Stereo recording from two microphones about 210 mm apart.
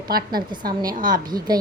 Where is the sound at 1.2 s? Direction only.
20° right (ahead or behind).